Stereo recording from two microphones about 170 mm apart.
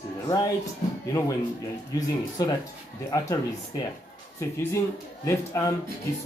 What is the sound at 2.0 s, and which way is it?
Speech, 20° left (ahead or behind).